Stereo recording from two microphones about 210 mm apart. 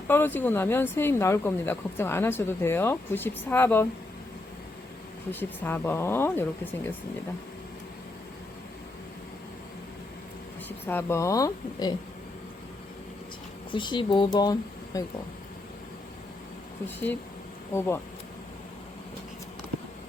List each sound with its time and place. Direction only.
0.1 s speech: 10° left (ahead or behind)
5.3 s speech: 10° left (ahead or behind)
10.7 s speech: 10° left (ahead or behind)
13.7 s speech: 20° left (ahead or behind)
16.8 s speech: 10° left (ahead or behind)